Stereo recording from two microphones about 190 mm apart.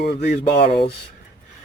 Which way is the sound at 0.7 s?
25° left (ahead or behind).